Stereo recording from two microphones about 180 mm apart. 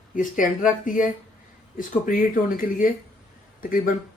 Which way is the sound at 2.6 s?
50° left (ahead or behind).